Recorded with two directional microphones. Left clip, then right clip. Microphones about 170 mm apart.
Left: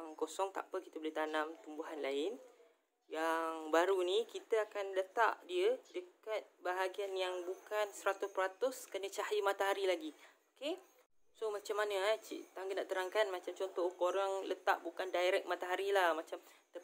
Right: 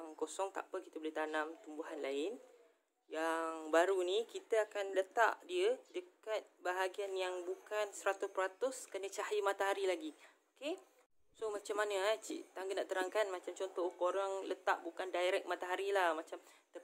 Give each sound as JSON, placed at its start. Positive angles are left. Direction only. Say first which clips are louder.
{"t": 0.0, "sound": "speech", "louder": "left 2 dB", "side_deg": 0}